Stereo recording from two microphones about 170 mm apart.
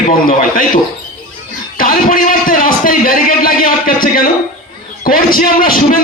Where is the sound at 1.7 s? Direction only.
55° left (ahead or behind).